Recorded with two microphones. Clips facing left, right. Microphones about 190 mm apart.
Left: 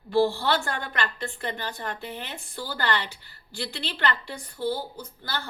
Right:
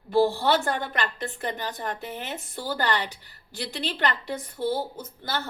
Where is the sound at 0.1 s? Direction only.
20° right (ahead or behind).